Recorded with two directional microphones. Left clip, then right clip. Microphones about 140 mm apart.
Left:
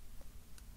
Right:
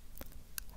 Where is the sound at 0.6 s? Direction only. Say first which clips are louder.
Right 17 dB; 25° right (ahead or behind).